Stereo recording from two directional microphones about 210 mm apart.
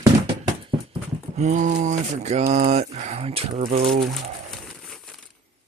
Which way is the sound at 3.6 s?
40° right (ahead or behind).